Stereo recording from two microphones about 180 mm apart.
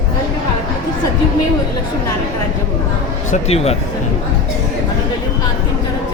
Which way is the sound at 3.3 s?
35° left (ahead or behind).